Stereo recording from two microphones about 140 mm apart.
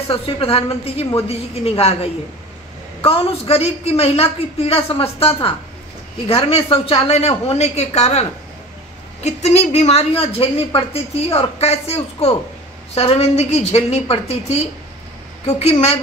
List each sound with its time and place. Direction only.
0.1 s a woman's voice: 45° left (ahead or behind)
15.7 s a woman's voice: 45° left (ahead or behind)